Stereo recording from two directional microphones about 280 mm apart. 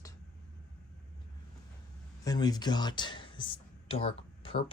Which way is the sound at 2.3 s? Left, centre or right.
Centre.